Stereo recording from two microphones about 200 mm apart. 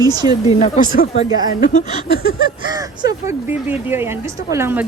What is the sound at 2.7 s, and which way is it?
A woman's voice, 15° right (ahead or behind).